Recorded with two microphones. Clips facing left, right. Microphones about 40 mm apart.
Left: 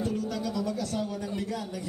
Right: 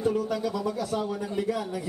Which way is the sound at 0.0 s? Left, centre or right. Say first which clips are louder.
Right 4 dB; centre.